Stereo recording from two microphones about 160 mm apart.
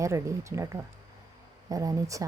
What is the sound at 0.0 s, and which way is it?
Speech, 20° right (ahead or behind).